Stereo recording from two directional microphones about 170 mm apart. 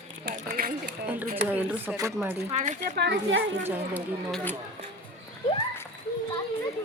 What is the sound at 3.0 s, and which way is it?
Speech, 85° right.